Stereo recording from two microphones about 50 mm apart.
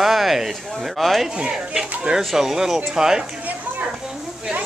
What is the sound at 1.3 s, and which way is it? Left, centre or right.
Speech, centre.